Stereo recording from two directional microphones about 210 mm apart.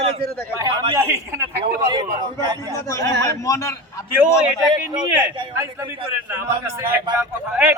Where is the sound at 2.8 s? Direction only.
15° left (ahead or behind).